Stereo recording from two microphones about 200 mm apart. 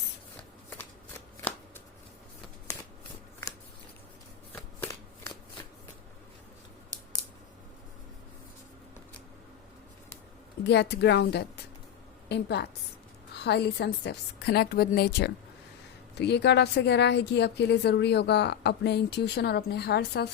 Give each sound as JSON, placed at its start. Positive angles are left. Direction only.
{"t": 4.5, "sound": "shuffling cards", "side_deg": 10}
{"t": 10.7, "sound": "speech", "side_deg": 60}